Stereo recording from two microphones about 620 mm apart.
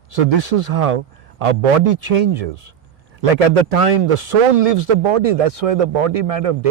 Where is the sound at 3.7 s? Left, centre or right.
Right.